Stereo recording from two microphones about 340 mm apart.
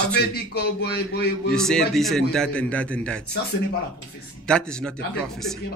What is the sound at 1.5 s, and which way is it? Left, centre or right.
Speech, centre.